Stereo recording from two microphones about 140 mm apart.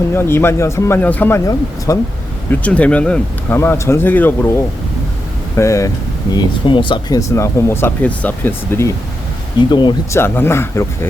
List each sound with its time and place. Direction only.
0.1 s speech: 15° left (ahead or behind)
1.9 s speech: 25° left (ahead or behind)
2.5 s speech: 10° left (ahead or behind)
5.5 s speech: 20° left (ahead or behind)
6.3 s speech: 35° left (ahead or behind)
7.2 s speech: 20° left (ahead or behind)
9.6 s speech: 35° left (ahead or behind)
10.1 s speech: 15° left (ahead or behind)